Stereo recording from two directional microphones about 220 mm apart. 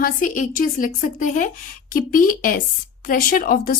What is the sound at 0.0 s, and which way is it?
A woman's voice, 35° left (ahead or behind).